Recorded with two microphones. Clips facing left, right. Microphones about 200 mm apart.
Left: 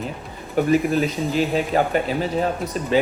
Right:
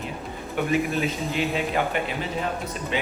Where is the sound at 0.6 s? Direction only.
40° left (ahead or behind).